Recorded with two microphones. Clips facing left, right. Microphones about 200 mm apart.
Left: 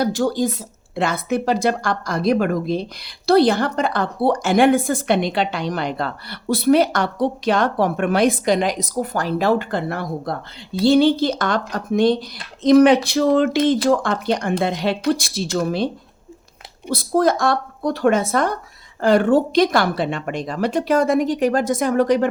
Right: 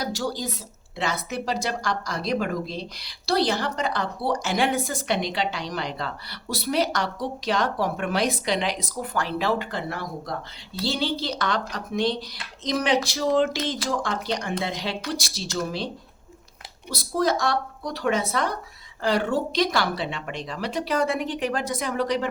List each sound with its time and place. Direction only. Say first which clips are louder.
0.0 s speech: left 9 dB; 55° left (ahead or behind)
16.9 s speech: left 6 dB; 55° left (ahead or behind)